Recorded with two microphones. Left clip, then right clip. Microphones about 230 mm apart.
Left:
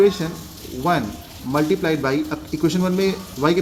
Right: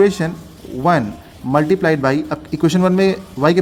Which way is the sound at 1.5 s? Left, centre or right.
Right.